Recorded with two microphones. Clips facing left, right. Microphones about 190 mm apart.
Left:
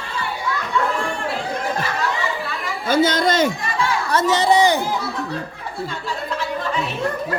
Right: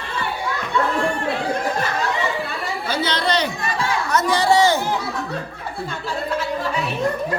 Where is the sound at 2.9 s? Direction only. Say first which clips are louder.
Left 6 dB; 45° left (ahead or behind).